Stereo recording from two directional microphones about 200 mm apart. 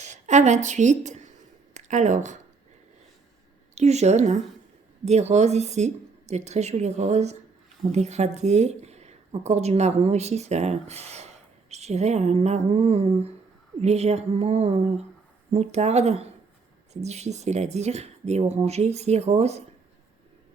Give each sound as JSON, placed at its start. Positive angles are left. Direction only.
{"t": 0.0, "sound": "a woman's voice", "side_deg": -35}
{"t": 3.8, "sound": "speech", "side_deg": -35}